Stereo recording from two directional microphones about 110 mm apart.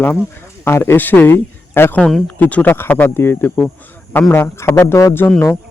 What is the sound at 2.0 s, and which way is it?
Speech, centre (ahead or behind).